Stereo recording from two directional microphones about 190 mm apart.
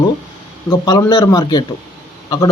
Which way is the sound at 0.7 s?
15° left (ahead or behind).